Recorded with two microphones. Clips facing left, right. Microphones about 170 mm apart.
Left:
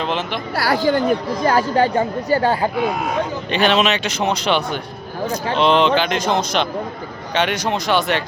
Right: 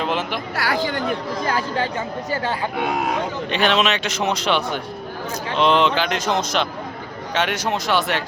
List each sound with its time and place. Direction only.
0.0 s speech: 10° right (ahead or behind)
0.5 s speech: 35° left (ahead or behind)
3.5 s a man's voice: centre (ahead or behind)